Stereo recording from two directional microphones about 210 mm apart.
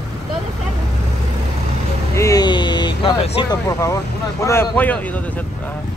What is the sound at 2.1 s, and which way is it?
Speech, 15° left (ahead or behind).